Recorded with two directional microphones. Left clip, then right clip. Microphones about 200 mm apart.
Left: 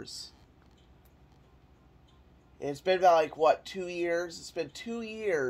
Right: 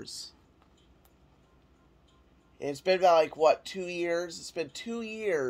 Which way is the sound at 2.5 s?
20° right (ahead or behind).